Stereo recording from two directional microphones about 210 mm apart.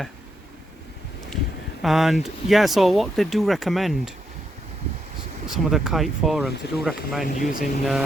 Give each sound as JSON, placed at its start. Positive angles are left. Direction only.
{"t": 1.8, "sound": "speech", "side_deg": 0}
{"t": 5.5, "sound": "speech", "side_deg": 0}
{"t": 7.3, "sound": "speech", "side_deg": 40}